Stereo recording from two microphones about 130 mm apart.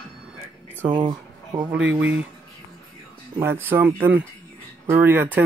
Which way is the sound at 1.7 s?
10° right (ahead or behind).